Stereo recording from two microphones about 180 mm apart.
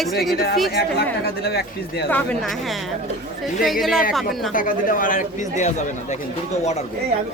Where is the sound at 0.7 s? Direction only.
60° left (ahead or behind).